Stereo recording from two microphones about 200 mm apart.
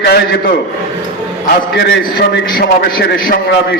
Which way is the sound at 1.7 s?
55° left (ahead or behind).